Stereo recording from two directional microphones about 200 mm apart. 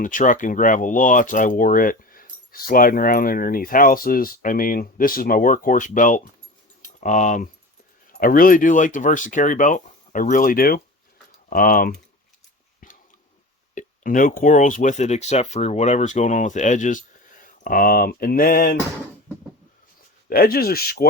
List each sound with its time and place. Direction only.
0.0 s speech: 40° left (ahead or behind)
13.7 s speech: 40° left (ahead or behind)
20.3 s speech: 50° left (ahead or behind)